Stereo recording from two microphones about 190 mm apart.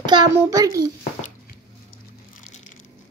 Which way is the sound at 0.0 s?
20° right (ahead or behind).